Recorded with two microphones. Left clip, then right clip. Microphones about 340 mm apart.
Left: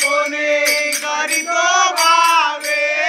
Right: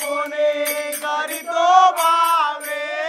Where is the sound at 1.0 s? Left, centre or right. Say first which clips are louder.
Left 5 dB; centre.